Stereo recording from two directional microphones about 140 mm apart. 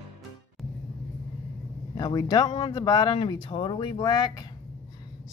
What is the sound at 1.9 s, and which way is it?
Speech, 30° left (ahead or behind).